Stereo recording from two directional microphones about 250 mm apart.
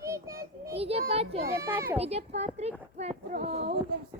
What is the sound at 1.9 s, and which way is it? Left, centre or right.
Speech, right.